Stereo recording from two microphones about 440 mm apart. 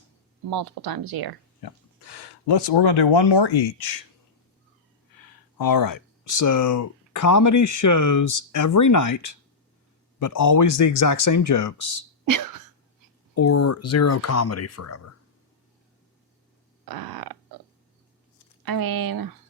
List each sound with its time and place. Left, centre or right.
0.5 s speech: right
1.6 s speech: left
5.1 s speech: left
12.2 s speech: right
13.3 s speech: left
16.8 s speech: right
18.6 s speech: right